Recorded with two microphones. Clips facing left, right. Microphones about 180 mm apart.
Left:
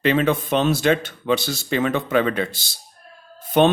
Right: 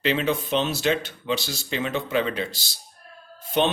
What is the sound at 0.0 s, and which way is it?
Speech, 50° left (ahead or behind).